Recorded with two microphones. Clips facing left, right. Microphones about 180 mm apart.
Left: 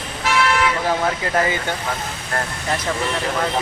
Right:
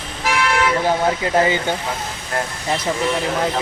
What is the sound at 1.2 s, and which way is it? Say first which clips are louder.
Speech: right 3 dB; 25° right (ahead or behind).